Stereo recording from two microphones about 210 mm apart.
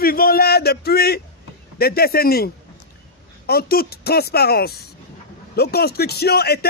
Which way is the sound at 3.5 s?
45° left (ahead or behind).